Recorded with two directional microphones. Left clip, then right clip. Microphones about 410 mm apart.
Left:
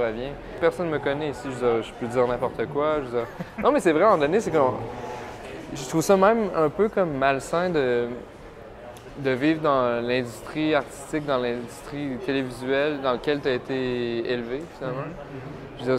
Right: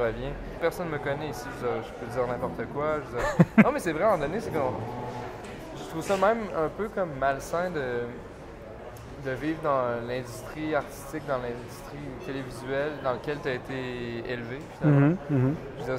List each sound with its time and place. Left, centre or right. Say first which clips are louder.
0.0 s speech: left 2 dB; left
5.9 s speech: left 6 dB; left
9.2 s speech: left 8 dB; left